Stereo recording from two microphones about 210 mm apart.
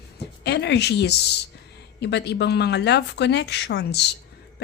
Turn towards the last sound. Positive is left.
turn(degrees=55)  # may be behind; listen again after turning